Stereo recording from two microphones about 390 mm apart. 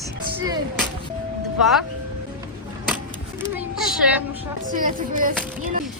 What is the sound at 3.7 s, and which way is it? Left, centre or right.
Speech, centre.